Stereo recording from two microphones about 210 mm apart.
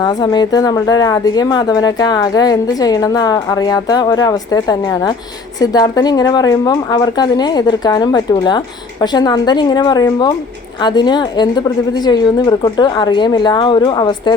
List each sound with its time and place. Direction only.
0.0 s speech: 20° left (ahead or behind)